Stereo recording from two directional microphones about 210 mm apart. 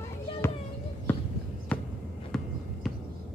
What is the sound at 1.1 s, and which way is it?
Basketball bounce, 10° left (ahead or behind).